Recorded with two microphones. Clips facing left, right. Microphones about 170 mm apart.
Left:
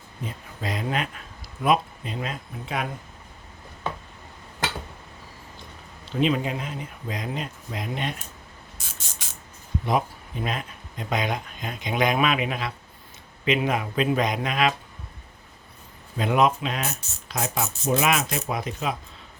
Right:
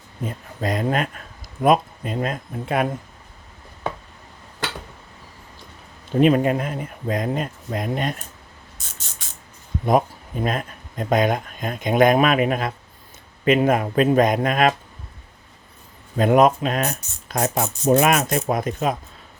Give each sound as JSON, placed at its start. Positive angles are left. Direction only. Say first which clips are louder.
{"t": 0.3, "sound": "speech", "louder": "right 7 dB", "side_deg": -45}
{"t": 6.1, "sound": "speech", "louder": "right 7 dB", "side_deg": -50}
{"t": 9.8, "sound": "speech", "louder": "right 6 dB", "side_deg": -45}
{"t": 16.1, "sound": "speech", "louder": "right 6 dB", "side_deg": -45}